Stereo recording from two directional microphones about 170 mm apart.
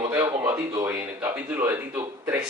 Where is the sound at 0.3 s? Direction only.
10° right (ahead or behind).